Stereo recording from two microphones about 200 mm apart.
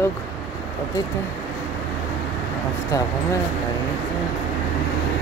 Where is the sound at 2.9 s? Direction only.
15° left (ahead or behind).